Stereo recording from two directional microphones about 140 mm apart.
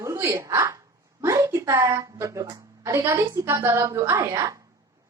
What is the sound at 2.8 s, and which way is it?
Music, 20° right (ahead or behind).